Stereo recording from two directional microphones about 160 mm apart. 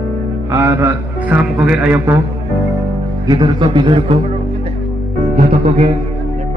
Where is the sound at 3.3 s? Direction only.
30° right (ahead or behind).